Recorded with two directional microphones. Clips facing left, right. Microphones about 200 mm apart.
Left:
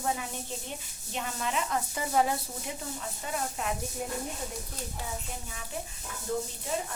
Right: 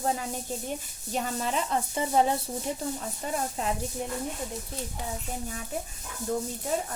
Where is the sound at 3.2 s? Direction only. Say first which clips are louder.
Right 4 dB; 40° right (ahead or behind).